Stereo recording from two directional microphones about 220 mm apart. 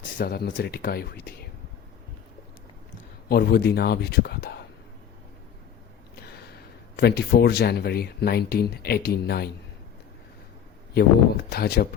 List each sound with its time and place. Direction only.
0.2 s speech: 45° left (ahead or behind)
3.2 s speech: 45° left (ahead or behind)
6.1 s speech: 45° left (ahead or behind)
10.9 s speech: 45° left (ahead or behind)